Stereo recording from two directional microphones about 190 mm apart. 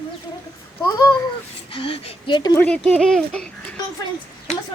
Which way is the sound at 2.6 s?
5° left (ahead or behind).